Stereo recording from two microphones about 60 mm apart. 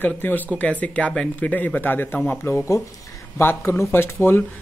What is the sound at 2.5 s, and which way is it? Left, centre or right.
Speech, left.